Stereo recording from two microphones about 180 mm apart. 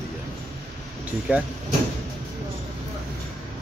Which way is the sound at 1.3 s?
5° right (ahead or behind).